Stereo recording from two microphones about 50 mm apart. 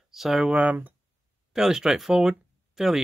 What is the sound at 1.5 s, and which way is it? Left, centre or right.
Speech, centre.